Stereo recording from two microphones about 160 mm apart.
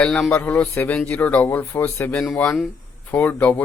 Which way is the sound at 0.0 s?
5° left (ahead or behind).